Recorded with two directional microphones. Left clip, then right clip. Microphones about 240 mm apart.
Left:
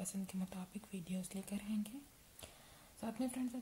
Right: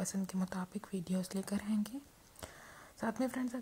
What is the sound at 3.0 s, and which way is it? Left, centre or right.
Speech, right.